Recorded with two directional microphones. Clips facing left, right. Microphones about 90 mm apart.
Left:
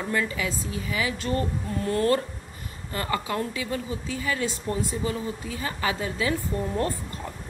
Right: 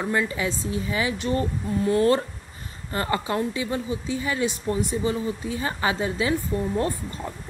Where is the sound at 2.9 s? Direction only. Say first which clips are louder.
Right 3 dB; 30° right (ahead or behind).